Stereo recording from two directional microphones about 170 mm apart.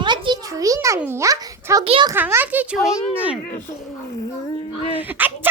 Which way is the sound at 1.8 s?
35° right (ahead or behind).